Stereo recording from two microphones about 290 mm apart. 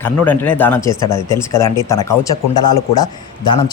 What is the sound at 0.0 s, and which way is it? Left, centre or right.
Speech, centre.